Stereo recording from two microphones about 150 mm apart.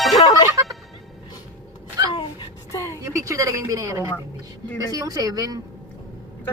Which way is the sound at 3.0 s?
20° right (ahead or behind).